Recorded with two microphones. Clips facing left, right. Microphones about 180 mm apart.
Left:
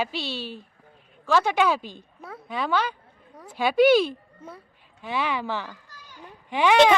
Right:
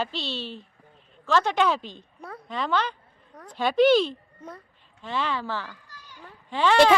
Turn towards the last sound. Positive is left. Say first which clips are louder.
# left 1 dB
turn(degrees=15)  # may be behind; listen again after turning